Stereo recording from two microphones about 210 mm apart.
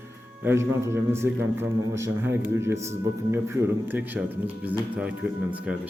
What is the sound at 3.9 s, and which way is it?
A man's voice, 10° right (ahead or behind).